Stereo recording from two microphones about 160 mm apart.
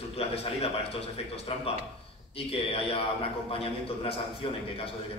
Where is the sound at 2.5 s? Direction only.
35° left (ahead or behind).